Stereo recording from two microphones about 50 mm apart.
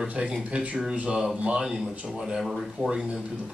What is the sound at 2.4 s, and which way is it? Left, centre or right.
Speech, centre.